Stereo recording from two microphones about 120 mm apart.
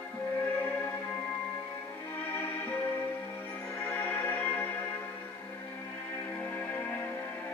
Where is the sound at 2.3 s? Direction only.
15° left (ahead or behind).